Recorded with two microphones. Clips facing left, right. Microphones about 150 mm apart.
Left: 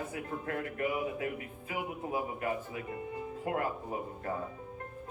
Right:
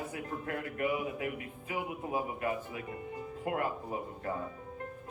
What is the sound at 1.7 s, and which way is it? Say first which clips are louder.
Speech: even; 30° right (ahead or behind).